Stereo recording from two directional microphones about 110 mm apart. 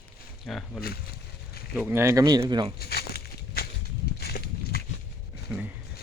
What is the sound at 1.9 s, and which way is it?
Speech, 25° right (ahead or behind).